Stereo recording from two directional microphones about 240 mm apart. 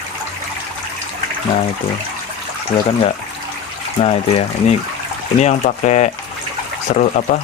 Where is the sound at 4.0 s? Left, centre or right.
Left.